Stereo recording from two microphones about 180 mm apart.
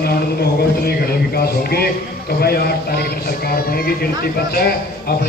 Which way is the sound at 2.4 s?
60° left (ahead or behind).